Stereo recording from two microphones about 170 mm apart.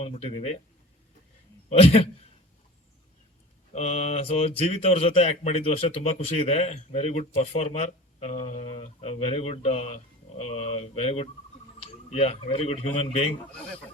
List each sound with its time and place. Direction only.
0.0 s speech: 40° left (ahead or behind)
1.8 s speech: 35° left (ahead or behind)
3.7 s speech: 40° left (ahead or behind)